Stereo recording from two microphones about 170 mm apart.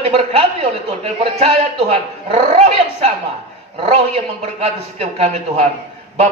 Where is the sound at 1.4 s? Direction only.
35° right (ahead or behind).